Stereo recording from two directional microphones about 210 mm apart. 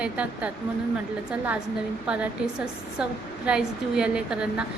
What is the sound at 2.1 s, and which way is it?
A woman's voice, 5° right (ahead or behind).